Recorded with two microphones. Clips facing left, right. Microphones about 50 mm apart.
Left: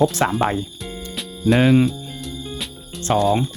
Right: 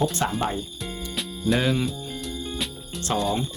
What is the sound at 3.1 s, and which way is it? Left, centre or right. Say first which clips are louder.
Speech: left 7 dB; left.